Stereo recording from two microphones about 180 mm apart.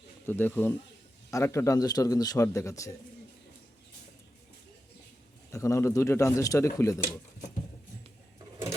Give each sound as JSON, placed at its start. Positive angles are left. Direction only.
{"t": 0.3, "sound": "a man's voice", "side_deg": 10}
{"t": 5.5, "sound": "a man's voice", "side_deg": 15}